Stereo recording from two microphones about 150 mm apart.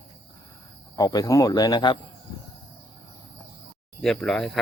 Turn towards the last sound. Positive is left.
turn(degrees=0)  # may be behind; listen again after turning